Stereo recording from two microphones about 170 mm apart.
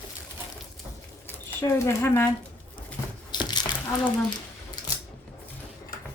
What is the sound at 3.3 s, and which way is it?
Crumpling, 25° left (ahead or behind).